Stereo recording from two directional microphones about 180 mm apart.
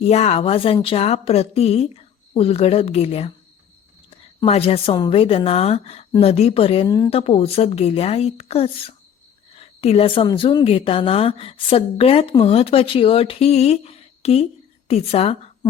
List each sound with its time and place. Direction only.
0.0 s a woman's voice: 35° left (ahead or behind)
4.4 s a woman's voice: 35° left (ahead or behind)
6.8 s a woman's voice: 20° left (ahead or behind)
7.1 s a woman's voice: 30° left (ahead or behind)
15.6 s a sound: 20° left (ahead or behind)